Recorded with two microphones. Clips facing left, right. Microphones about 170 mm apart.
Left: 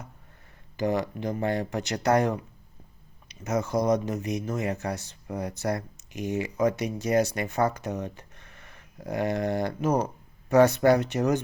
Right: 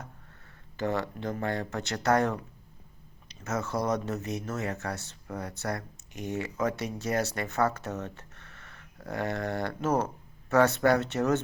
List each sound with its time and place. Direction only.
0.8 s speech: 15° left (ahead or behind)
3.4 s speech: 15° left (ahead or behind)